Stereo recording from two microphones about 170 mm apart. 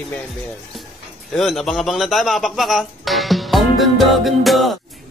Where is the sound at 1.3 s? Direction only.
Centre (ahead or behind).